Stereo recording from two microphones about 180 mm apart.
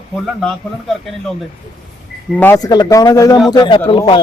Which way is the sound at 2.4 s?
15° left (ahead or behind).